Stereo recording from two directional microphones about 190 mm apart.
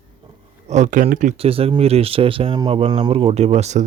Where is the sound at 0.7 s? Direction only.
40° right (ahead or behind).